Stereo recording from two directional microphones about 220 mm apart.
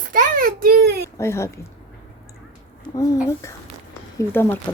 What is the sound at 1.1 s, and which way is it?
Speech, 10° left (ahead or behind).